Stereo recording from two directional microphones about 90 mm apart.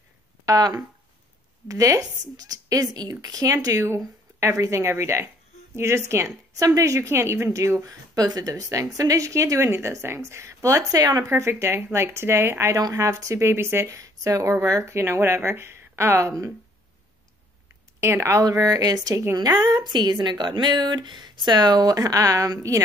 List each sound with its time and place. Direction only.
0.5 s speech: 45° right (ahead or behind)
3.6 s a woman's voice: 35° right (ahead or behind)
11.2 s a woman's voice: 30° right (ahead or behind)
18.0 s speech: 30° right (ahead or behind)
18.4 s a woman's voice: 45° right (ahead or behind)